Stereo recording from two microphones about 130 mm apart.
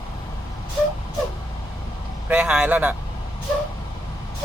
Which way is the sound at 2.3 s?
5° right (ahead or behind).